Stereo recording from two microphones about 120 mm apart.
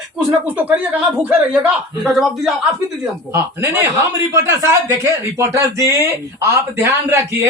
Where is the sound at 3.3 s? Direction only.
20° right (ahead or behind).